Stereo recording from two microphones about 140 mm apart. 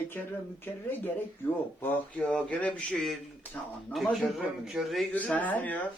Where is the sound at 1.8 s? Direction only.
10° left (ahead or behind).